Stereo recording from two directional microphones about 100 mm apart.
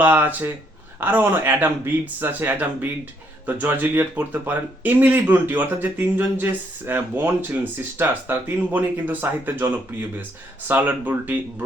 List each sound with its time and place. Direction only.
0.0 s speech: 20° right (ahead or behind)